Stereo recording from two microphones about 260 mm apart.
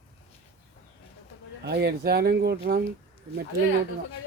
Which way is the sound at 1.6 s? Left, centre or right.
Right.